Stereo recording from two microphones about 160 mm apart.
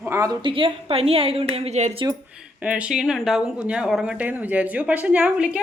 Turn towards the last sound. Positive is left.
turn(degrees=-5)  # may be behind; listen again after turning